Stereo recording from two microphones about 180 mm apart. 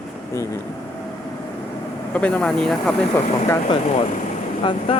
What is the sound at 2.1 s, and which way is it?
Speech, 5° left (ahead or behind).